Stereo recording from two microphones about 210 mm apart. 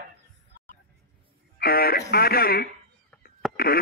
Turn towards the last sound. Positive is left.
turn(degrees=0)  # may be behind; listen again after turning